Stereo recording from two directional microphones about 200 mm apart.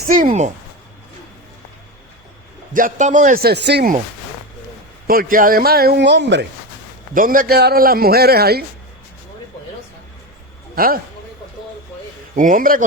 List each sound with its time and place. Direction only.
0.1 s speech: 40° right (ahead or behind)
2.7 s speech: 40° right (ahead or behind)
5.0 s speech: 45° right (ahead or behind)
7.1 s speech: 45° right (ahead or behind)
10.8 s a man's voice: 45° right (ahead or behind)
12.4 s speech: 45° right (ahead or behind)